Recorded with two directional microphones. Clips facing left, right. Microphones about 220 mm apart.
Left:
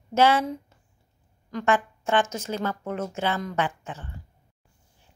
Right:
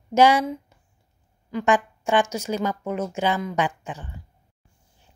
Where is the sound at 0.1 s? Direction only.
15° right (ahead or behind).